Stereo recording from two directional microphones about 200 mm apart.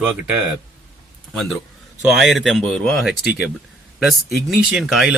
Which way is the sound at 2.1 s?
Centre (ahead or behind).